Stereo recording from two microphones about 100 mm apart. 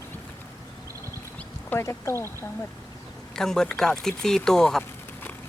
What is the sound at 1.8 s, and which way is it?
Speech, 30° left (ahead or behind).